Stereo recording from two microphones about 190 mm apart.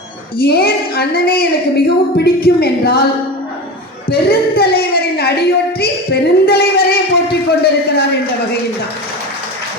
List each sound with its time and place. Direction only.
0.3 s a woman's voice: 55° left (ahead or behind)
4.1 s a woman's voice: 55° left (ahead or behind)